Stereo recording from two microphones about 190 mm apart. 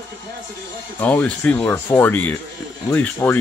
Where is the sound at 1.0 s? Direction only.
10° left (ahead or behind).